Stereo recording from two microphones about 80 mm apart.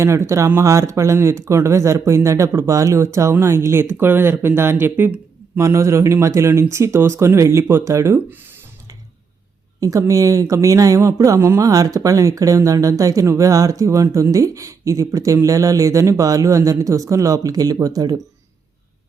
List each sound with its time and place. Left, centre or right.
0.0 s speech: right
5.5 s speech: right
10.0 s speech: right
11.6 s speech: right